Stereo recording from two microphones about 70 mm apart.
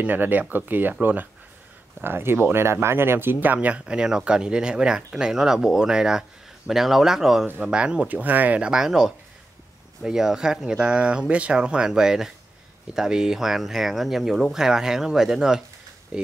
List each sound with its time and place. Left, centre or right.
0.0 s speech: right
2.0 s speech: right
8.6 s speech: centre